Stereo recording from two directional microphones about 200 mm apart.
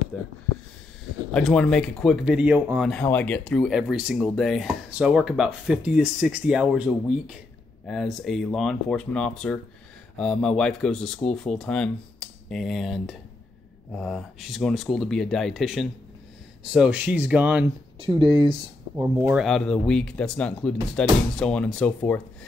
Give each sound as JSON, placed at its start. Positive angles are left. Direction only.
{"t": 1.3, "sound": "speech", "side_deg": 5}
{"t": 2.9, "sound": "speech", "side_deg": 10}
{"t": 17.9, "sound": "speech", "side_deg": -25}
{"t": 19.2, "sound": "speech", "side_deg": 0}